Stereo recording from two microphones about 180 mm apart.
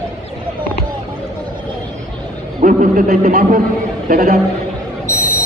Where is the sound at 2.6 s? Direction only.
50° right (ahead or behind).